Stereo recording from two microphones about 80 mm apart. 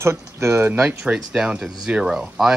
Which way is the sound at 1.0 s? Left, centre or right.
Centre.